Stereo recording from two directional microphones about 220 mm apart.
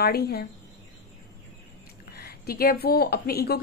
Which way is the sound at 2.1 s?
45° left (ahead or behind).